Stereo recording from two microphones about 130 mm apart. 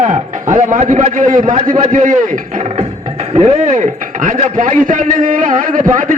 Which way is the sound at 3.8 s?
85° right.